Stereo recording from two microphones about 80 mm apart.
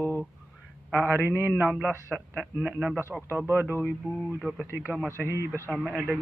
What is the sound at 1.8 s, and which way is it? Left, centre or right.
Speech, centre.